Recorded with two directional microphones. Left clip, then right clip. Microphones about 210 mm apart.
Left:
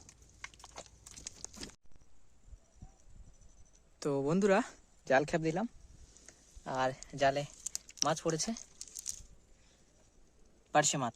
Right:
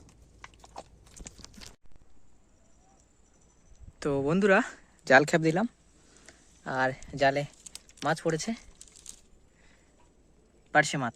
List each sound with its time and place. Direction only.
0.4 s horse: 5° right (ahead or behind)
4.0 s speech: 10° left (ahead or behind)
5.0 s speech: 15° right (ahead or behind)
6.2 s a sound: 5° right (ahead or behind)
10.7 s speech: 5° left (ahead or behind)